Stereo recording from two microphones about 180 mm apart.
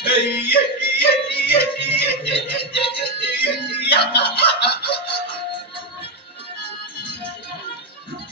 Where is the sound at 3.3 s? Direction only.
65° left (ahead or behind).